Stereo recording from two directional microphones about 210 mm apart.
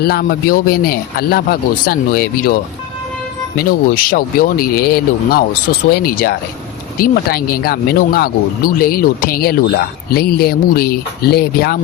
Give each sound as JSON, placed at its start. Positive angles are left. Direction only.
{"t": 0.0, "sound": "speech", "side_deg": 45}
{"t": 3.7, "sound": "speech", "side_deg": 45}